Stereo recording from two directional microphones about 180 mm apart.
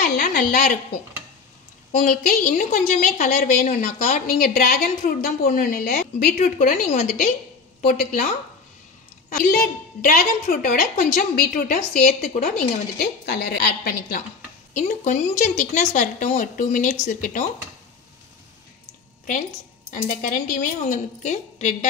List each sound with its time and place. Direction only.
0.0 s a sound: 60° left (ahead or behind)
1.9 s a woman's voice: 45° left (ahead or behind)
6.3 s a woman's voice: 40° left (ahead or behind)
9.5 s a woman's voice: 55° left (ahead or behind)
13.0 s a woman's voice: 65° left (ahead or behind)
14.7 s a woman's voice: 45° left (ahead or behind)
19.9 s a woman's voice: 50° left (ahead or behind)